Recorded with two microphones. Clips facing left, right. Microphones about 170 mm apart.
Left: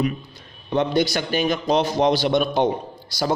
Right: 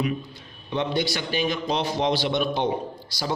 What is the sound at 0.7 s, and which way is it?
A man's voice, 45° left (ahead or behind).